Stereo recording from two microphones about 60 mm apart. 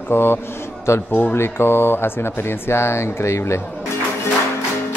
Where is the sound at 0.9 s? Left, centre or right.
Left.